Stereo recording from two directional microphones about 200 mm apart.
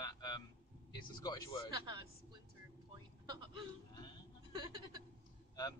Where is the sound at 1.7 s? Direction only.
20° right (ahead or behind).